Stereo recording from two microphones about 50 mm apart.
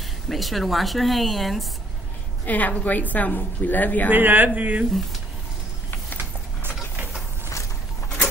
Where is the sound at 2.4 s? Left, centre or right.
Left.